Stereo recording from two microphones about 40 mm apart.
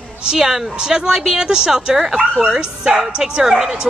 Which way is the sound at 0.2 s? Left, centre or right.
Centre.